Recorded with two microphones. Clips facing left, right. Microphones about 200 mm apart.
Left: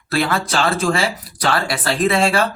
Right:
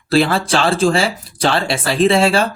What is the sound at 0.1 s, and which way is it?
Speech, 30° right (ahead or behind).